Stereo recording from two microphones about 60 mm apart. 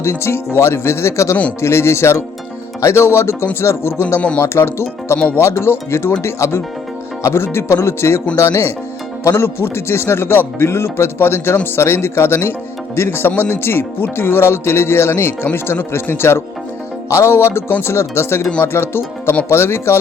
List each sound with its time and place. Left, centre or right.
0.0 s speech: left
17.1 s speech: left
17.7 s speech: left
17.9 s speech: left